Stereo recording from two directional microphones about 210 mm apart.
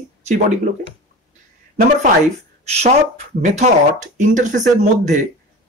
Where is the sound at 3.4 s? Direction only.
35° right (ahead or behind).